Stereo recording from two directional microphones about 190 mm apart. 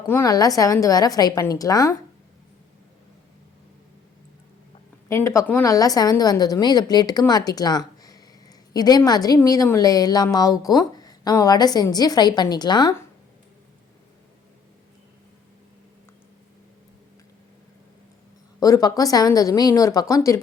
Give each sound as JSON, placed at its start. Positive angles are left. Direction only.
{"t": 0.1, "sound": "a woman's voice", "side_deg": 15}
{"t": 5.0, "sound": "a woman's voice", "side_deg": 15}
{"t": 18.6, "sound": "a woman's voice", "side_deg": 20}